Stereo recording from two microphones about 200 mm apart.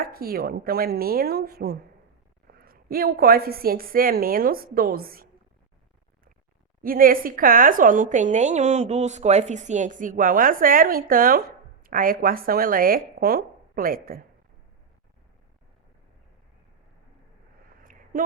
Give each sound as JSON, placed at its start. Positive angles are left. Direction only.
{"t": 0.0, "sound": "a woman's voice", "side_deg": -50}
{"t": 6.8, "sound": "a woman's voice", "side_deg": -45}